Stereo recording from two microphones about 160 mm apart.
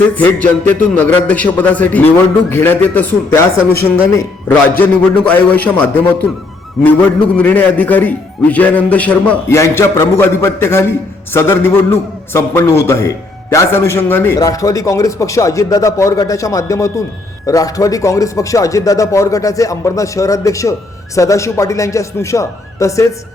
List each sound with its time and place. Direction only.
0.2 s a man's voice: 10° left (ahead or behind)
7.3 s a man's voice: 10° left (ahead or behind)